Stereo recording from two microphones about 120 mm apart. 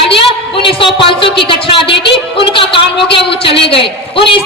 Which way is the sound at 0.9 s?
45° left (ahead or behind).